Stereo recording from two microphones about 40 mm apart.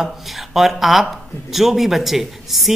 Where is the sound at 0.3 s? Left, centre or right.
Centre.